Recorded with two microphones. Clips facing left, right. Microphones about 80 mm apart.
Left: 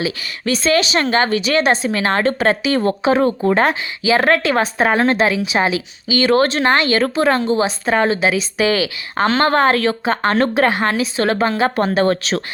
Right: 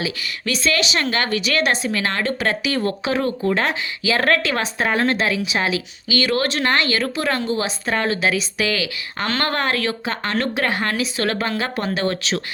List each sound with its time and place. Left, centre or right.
0.0 s speech: left
4.0 s a woman's voice: centre
4.6 s speech: left
5.1 s speech: centre
5.5 s a woman's voice: left
10.7 s a woman's voice: left
11.8 s speech: left